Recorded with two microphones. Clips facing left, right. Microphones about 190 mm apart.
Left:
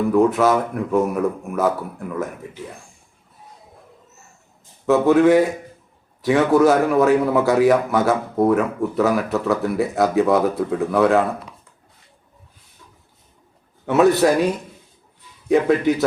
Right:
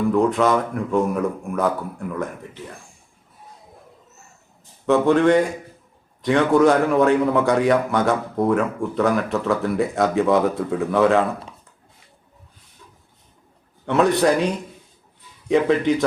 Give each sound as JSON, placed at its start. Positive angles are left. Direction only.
{"t": 0.1, "sound": "a man's voice", "side_deg": 0}
{"t": 4.9, "sound": "a man's voice", "side_deg": 5}
{"t": 13.8, "sound": "a man's voice", "side_deg": 5}